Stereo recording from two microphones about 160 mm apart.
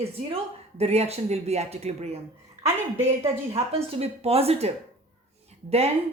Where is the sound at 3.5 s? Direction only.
40° right (ahead or behind).